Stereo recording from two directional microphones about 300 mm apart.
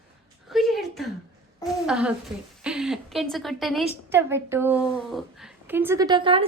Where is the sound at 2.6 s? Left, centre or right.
Centre.